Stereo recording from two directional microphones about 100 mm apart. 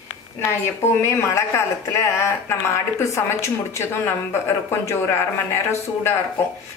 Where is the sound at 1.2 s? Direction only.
30° left (ahead or behind).